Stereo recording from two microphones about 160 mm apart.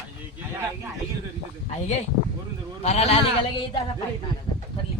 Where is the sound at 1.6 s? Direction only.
45° left (ahead or behind).